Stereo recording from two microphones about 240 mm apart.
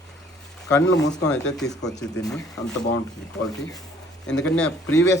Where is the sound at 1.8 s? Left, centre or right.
Centre.